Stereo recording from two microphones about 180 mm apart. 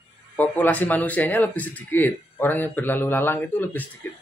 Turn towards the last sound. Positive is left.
turn(degrees=10)  # may be behind; listen again after turning